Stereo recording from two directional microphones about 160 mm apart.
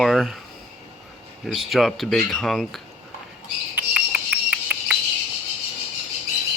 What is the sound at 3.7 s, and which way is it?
Cricket, 5° right (ahead or behind).